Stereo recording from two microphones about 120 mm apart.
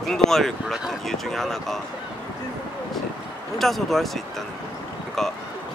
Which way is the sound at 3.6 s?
Centre (ahead or behind).